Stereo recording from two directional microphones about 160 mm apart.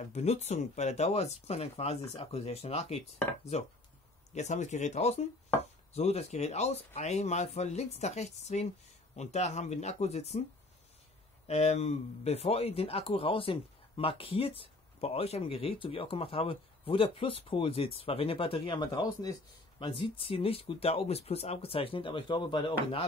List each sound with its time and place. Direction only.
0.1 s speech: 45° left (ahead or behind)
4.3 s speech: 45° left (ahead or behind)
11.4 s speech: 40° left (ahead or behind)